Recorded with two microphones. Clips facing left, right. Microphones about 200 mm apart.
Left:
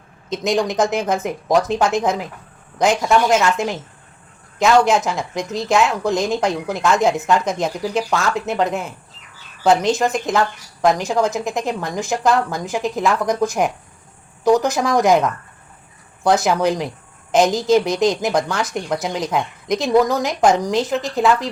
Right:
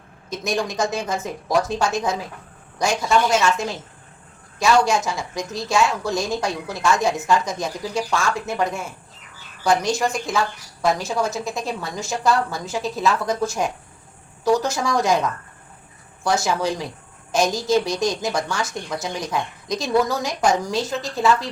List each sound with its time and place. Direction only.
0.3 s a woman's voice: 20° left (ahead or behind)